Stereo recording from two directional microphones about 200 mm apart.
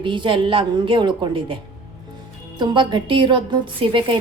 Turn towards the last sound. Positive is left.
turn(degrees=-25)  # may be behind; listen again after turning